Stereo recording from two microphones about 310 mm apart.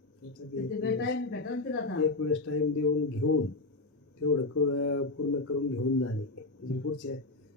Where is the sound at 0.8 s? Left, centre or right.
Left.